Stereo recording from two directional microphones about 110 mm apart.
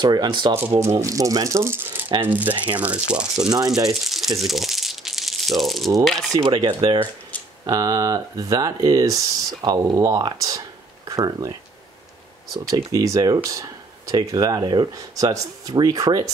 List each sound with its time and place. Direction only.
0.0 s speech: 40° right (ahead or behind)
0.6 s speech: 20° right (ahead or behind)
3.4 s speech: 35° right (ahead or behind)
3.9 s crumpling: centre (ahead or behind)
6.3 s speech: 40° right (ahead or behind)
7.6 s speech: 30° right (ahead or behind)
12.5 s speech: 35° right (ahead or behind)